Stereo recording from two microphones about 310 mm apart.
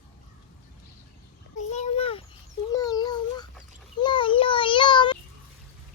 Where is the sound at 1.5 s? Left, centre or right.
Left.